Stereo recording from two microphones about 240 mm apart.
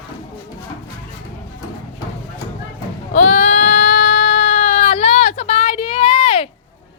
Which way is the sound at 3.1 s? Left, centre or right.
Left.